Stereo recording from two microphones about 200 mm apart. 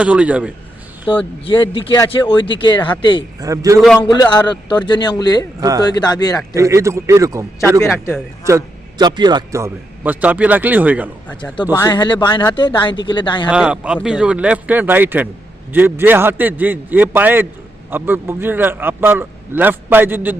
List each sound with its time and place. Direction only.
0.0 s a man's voice: 5° right (ahead or behind)
1.5 s speech: 25° left (ahead or behind)
3.4 s a man's voice: 15° right (ahead or behind)
4.0 s speech: 25° left (ahead or behind)
5.5 s a man's voice: 20° right (ahead or behind)
5.8 s speech: 20° left (ahead or behind)
6.5 s a man's voice: 15° right (ahead or behind)
7.8 s speech: 10° left (ahead or behind)
8.4 s a man's voice: 15° right (ahead or behind)
11.7 s speech: 20° left (ahead or behind)
13.5 s a man's voice: 5° right (ahead or behind)